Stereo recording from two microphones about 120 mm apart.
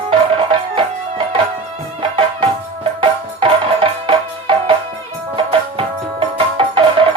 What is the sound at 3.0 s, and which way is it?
Music, 45° right (ahead or behind).